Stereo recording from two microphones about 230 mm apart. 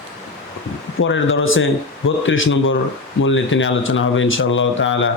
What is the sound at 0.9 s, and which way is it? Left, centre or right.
Speech, left.